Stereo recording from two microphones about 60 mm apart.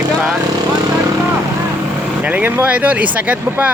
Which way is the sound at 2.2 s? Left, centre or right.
Right.